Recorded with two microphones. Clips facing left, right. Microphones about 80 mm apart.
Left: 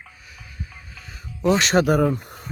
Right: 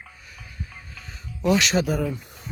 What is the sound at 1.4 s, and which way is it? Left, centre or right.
Speech, left.